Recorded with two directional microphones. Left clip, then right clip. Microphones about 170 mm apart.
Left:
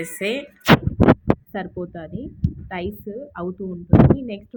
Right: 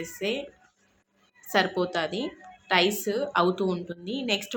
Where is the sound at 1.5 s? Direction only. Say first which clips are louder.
Right 6 dB; 5° left (ahead or behind).